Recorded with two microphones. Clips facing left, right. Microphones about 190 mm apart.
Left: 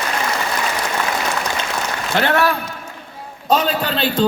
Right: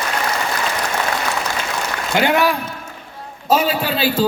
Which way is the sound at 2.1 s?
15° right (ahead or behind).